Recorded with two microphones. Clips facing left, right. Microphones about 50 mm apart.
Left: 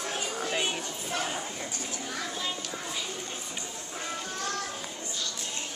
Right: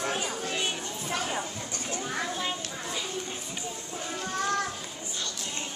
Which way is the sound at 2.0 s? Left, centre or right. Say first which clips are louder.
Right 3 dB; right.